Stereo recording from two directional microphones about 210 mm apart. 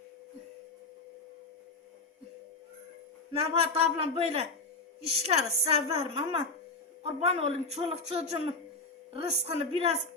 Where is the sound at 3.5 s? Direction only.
25° right (ahead or behind).